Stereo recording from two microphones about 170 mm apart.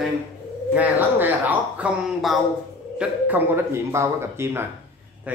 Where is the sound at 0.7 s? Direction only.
10° right (ahead or behind).